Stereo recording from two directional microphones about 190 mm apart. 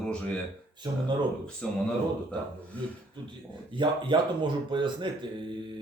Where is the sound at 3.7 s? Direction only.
25° right (ahead or behind).